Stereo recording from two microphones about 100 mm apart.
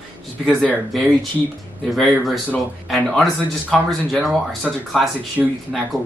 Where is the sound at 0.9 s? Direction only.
Centre (ahead or behind).